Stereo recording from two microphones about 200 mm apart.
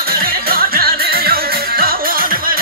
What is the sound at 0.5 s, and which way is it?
Music, 50° right (ahead or behind).